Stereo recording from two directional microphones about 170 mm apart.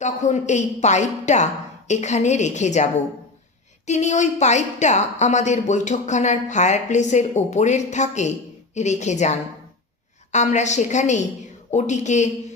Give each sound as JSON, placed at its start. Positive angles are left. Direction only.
{"t": 0.0, "sound": "a woman's voice", "side_deg": 45}